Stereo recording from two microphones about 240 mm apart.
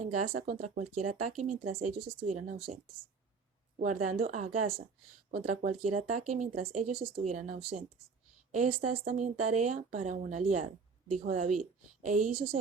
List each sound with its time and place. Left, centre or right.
0.0 s speech: right
3.8 s speech: right
8.8 s speech: right